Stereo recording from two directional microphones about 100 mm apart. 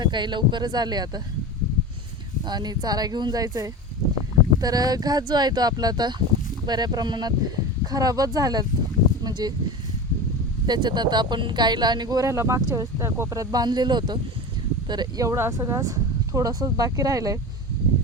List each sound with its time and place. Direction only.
0.0 s speech: 50° right (ahead or behind)
2.5 s speech: 45° right (ahead or behind)
10.7 s speech: 45° right (ahead or behind)